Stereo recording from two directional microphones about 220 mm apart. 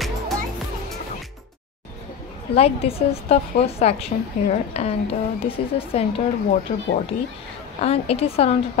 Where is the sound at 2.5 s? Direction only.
25° left (ahead or behind).